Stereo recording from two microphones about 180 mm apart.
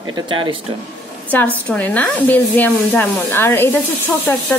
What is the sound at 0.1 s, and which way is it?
Speech, 25° right (ahead or behind).